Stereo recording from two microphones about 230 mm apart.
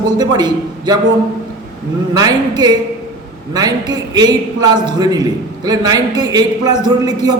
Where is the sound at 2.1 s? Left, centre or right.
Centre.